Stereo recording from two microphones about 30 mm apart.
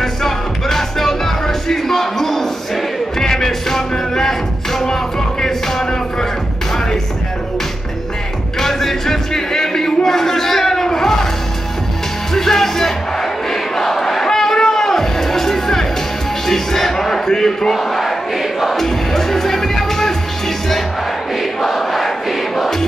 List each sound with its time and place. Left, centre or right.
0.0 s music: centre
8.5 s a sound: centre
12.4 s crowd: centre
16.4 s music: centre
17.4 s a sound: centre
17.7 s battle cry: centre
18.8 s music: centre
21.4 s crowd: centre